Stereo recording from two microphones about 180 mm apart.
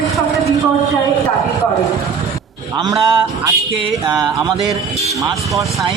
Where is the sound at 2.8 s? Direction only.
25° right (ahead or behind).